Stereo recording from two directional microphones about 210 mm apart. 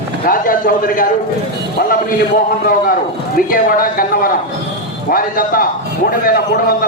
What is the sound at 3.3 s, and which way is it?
A man's voice, 45° left (ahead or behind).